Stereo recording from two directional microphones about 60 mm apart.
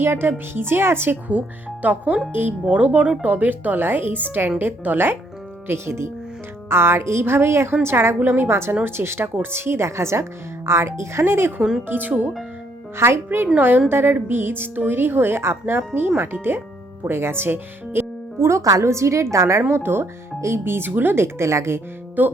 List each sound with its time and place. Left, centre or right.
0.0 s speech: right
1.3 s speech: right
3.2 s speech: right
5.6 s a woman's voice: right
11.9 s speech: right
13.0 s a woman's voice: right
18.8 s a woman's voice: right
19.7 s speech: right
22.2 s speech: right